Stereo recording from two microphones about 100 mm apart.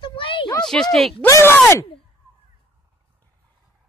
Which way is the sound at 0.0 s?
60° left (ahead or behind).